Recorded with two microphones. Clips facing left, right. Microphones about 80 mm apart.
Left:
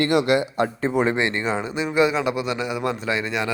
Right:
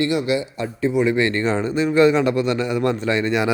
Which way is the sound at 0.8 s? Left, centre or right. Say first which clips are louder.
Right 5 dB; left.